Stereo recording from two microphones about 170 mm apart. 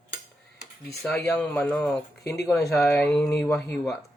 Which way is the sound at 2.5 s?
15° left (ahead or behind).